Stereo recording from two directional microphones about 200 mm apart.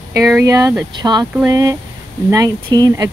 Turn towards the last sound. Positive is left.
turn(degrees=-20)  # may be behind; listen again after turning